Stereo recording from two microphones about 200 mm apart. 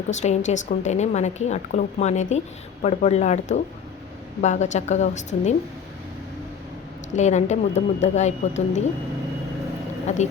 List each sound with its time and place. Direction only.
0.1 s a woman's voice: 35° left (ahead or behind)
7.1 s a woman's voice: 35° left (ahead or behind)
10.1 s a woman's voice: 35° left (ahead or behind)